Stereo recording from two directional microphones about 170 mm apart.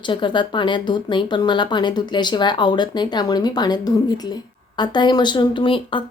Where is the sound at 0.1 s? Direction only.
30° left (ahead or behind).